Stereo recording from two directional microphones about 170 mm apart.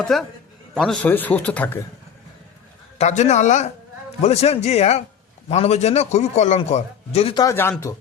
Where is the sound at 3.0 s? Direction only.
40° left (ahead or behind).